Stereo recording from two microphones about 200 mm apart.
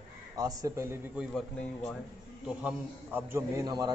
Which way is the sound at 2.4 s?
10° right (ahead or behind).